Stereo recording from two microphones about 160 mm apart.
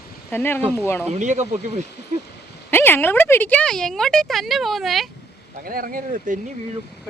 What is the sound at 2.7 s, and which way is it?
A woman's voice, 15° left (ahead or behind).